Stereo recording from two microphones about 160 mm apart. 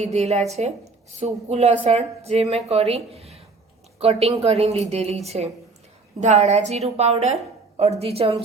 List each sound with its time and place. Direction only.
0.0 s a woman's voice: 45° right (ahead or behind)